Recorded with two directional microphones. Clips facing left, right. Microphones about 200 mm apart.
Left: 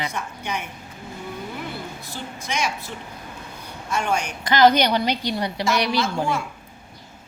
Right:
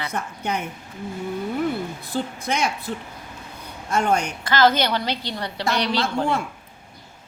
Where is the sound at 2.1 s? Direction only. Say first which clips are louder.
Right 5 dB; 55° right (ahead or behind).